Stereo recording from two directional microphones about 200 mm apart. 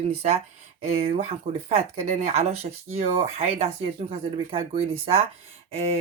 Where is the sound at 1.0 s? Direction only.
30° right (ahead or behind).